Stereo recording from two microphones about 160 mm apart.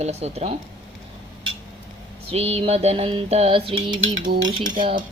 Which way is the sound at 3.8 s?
25° right (ahead or behind).